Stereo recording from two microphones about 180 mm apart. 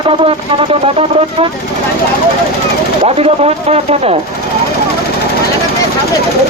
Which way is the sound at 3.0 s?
35° right (ahead or behind).